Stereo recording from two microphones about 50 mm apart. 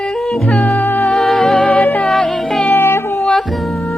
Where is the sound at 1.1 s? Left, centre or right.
Centre.